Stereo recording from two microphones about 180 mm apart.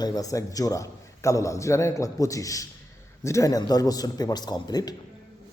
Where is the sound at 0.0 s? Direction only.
20° left (ahead or behind).